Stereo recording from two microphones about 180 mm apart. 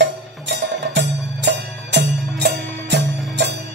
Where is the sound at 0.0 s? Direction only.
70° right (ahead or behind).